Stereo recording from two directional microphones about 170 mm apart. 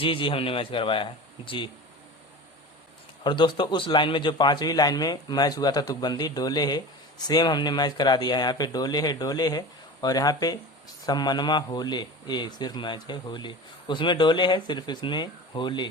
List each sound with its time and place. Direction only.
0.0 s speech: 30° left (ahead or behind)
3.2 s a man's voice: 25° left (ahead or behind)